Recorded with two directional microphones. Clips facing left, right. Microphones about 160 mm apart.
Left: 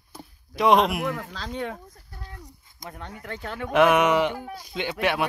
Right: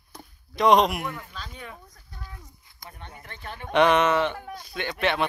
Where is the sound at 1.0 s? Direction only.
90° left.